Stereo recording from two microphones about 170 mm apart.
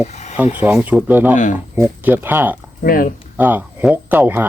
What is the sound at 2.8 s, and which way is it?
Speech, 60° left (ahead or behind).